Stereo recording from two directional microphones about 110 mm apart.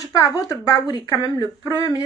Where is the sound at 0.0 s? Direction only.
30° left (ahead or behind).